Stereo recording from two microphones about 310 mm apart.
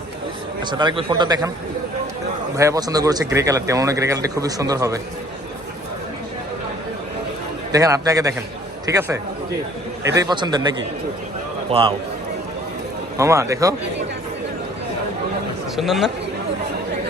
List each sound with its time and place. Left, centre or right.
0.6 s speech: centre
2.6 s speech: centre
7.7 s speech: centre
10.2 s speech: centre
11.7 s speech: centre
13.1 s speech: centre
15.7 s a man's voice: centre